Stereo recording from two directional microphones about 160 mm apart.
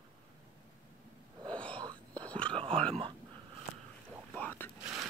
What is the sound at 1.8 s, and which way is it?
Whispering, 25° right (ahead or behind).